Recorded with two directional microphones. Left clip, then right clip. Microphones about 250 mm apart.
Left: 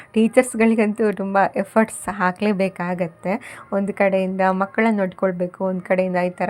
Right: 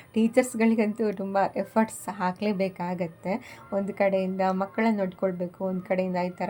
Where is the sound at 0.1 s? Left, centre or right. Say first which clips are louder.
Left 7 dB; centre.